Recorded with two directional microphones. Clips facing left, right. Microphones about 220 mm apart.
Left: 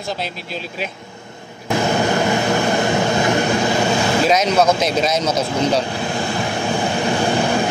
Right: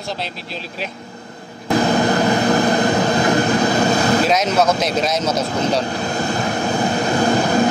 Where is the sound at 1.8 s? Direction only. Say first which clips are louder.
Right 2 dB; 35° right (ahead or behind).